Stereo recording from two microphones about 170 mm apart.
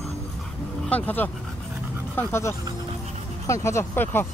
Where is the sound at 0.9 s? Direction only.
10° left (ahead or behind).